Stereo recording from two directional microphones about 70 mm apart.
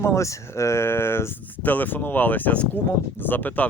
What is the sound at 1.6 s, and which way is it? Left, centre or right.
Speech, left.